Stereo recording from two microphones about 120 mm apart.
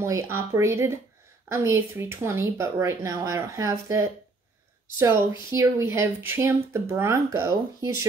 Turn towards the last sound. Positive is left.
turn(degrees=-30)  # may be behind; listen again after turning